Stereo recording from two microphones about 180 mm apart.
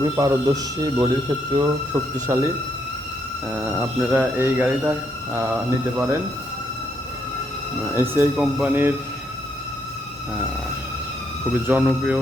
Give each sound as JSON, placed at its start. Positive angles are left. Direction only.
{"t": 0.0, "sound": "speech", "side_deg": -20}
{"t": 3.5, "sound": "speech", "side_deg": -10}
{"t": 8.1, "sound": "speech", "side_deg": -10}
{"t": 11.5, "sound": "speech", "side_deg": -10}